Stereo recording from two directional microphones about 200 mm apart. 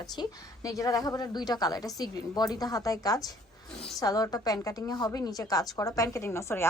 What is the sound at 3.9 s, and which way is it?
A woman's voice, 15° left (ahead or behind).